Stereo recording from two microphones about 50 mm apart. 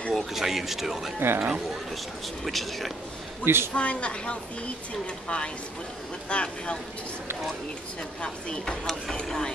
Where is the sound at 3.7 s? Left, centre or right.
Left.